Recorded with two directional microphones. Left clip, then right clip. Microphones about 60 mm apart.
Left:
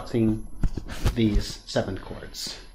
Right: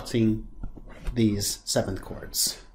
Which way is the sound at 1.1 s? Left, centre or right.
Right.